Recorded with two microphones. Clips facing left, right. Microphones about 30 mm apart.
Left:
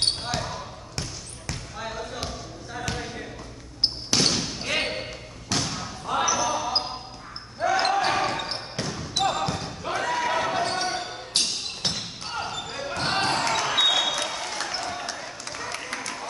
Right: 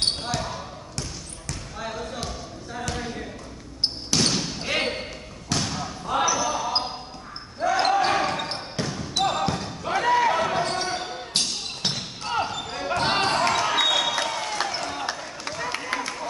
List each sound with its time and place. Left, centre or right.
1.8 s basketball bounce: centre
4.3 s basketball bounce: centre
10.0 s basketball bounce: centre
10.3 s basketball bounce: centre
14.1 s a sound: centre